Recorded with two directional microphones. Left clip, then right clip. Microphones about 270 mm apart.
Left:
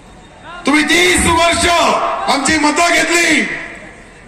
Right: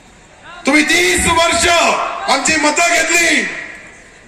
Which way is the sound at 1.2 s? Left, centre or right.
Right.